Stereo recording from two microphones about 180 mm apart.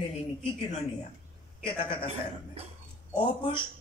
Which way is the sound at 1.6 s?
30° left (ahead or behind).